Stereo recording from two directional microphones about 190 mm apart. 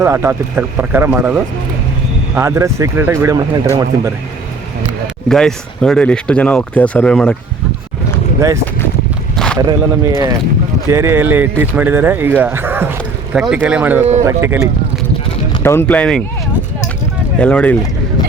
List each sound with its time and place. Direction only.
0.0 s speech: 15° right (ahead or behind)
5.3 s speech: centre (ahead or behind)
8.4 s speech: 15° right (ahead or behind)
14.0 s speech: 35° right (ahead or behind)
14.3 s speech: 15° right (ahead or behind)
15.6 s speech: 10° left (ahead or behind)
17.3 s speech: 5° left (ahead or behind)